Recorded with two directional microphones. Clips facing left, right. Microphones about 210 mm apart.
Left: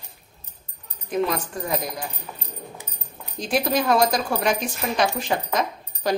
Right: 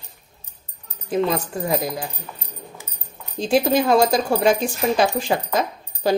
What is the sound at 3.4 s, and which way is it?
Speech, 25° right (ahead or behind).